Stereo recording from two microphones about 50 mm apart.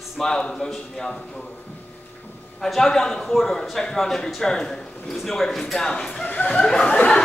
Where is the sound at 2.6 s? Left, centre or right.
Centre; by 7.1 s left.